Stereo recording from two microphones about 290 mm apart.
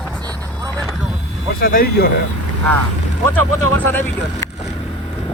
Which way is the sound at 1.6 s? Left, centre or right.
Left.